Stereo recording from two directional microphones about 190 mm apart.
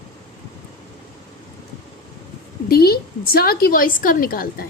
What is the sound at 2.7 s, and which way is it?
A woman's voice, 55° left (ahead or behind).